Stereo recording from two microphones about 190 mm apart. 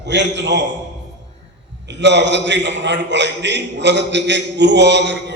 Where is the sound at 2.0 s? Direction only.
65° right (ahead or behind).